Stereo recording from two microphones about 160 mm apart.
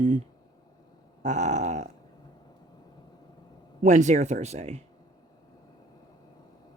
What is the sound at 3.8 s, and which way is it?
Speech, 50° right (ahead or behind).